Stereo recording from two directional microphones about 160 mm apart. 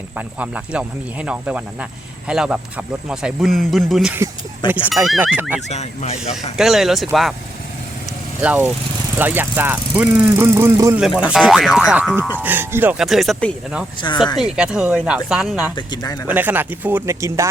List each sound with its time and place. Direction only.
0.2 s speech: 10° right (ahead or behind)
5.5 s speech: 45° left (ahead or behind)
6.6 s speech: centre (ahead or behind)
8.4 s speech: 10° right (ahead or behind)
11.2 s speech: 5° right (ahead or behind)
14.0 s speech: 25° left (ahead or behind)
14.5 s speech: 5° right (ahead or behind)
15.7 s speech: 25° left (ahead or behind)
16.2 s speech: 10° right (ahead or behind)